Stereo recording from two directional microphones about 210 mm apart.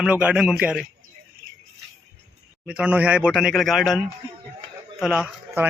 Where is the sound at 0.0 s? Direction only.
5° right (ahead or behind).